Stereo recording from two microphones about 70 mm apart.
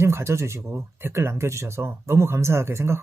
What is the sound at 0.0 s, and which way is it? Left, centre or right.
Speech, right.